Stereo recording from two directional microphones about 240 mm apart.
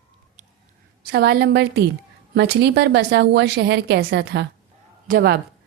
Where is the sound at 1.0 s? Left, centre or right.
Right.